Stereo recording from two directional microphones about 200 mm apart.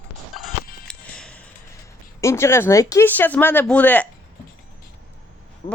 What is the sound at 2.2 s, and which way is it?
Speech, 15° left (ahead or behind).